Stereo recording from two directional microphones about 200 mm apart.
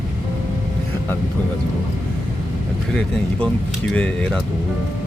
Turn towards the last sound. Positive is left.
turn(degrees=5)  # may be behind; listen again after turning